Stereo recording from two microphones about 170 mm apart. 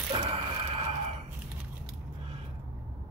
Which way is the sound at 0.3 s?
35° right (ahead or behind).